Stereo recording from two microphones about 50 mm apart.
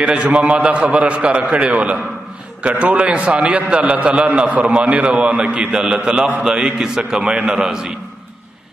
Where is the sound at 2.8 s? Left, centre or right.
Right.